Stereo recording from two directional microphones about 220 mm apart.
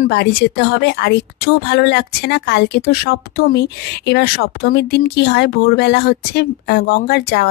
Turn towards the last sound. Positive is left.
turn(degrees=45)  # may be behind; listen again after turning